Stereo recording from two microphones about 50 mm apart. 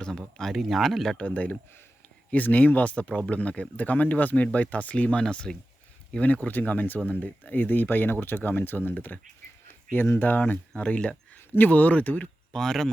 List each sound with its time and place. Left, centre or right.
0.5 s speech: centre
1.1 s speech: left
5.2 s speech: centre
6.1 s speech: left
9.6 s a sound: left
10.2 s speech: left
12.5 s speech: centre